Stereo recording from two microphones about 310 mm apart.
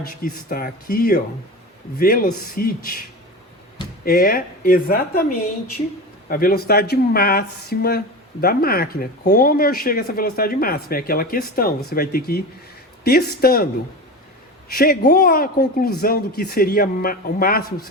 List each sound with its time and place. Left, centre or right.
0.2 s speech: left
2.0 s speech: left
4.0 s speech: left
6.2 s a man's voice: left
14.8 s speech: left